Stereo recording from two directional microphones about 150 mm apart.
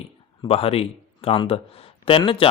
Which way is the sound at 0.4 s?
40° left (ahead or behind).